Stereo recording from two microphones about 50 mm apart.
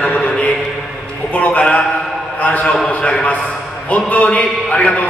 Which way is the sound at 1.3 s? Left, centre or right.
Left.